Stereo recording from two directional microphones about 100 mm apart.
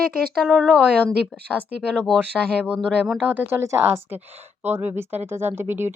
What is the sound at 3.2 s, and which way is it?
Speech, 20° right (ahead or behind).